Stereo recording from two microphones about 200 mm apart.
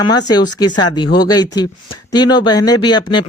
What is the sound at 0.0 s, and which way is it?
Speech, 20° left (ahead or behind).